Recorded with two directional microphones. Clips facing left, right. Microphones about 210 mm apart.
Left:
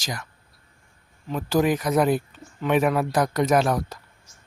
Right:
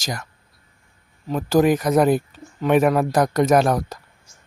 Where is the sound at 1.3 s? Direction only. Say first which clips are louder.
Right 5 dB; 45° right (ahead or behind).